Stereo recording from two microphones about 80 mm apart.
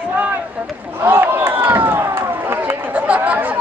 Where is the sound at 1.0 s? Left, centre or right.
Right.